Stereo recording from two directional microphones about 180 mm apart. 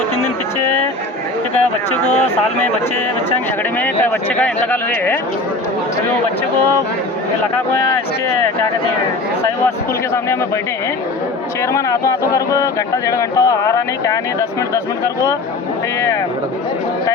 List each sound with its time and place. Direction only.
3.8 s speech: 10° left (ahead or behind)
11.7 s speech: 15° left (ahead or behind)